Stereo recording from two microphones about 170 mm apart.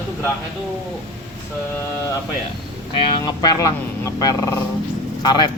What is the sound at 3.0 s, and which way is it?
Speech, 25° left (ahead or behind).